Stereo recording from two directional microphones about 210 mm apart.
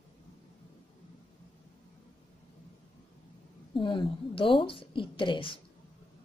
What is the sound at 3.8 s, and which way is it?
A woman's voice, 25° left (ahead or behind).